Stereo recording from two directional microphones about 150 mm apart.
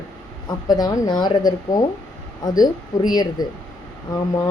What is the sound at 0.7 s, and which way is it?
Speech, 25° left (ahead or behind).